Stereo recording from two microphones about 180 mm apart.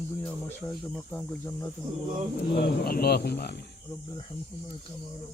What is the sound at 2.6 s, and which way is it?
Speech, 60° left (ahead or behind).